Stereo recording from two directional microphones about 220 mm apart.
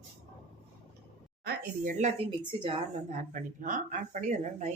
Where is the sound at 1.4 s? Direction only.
45° right (ahead or behind).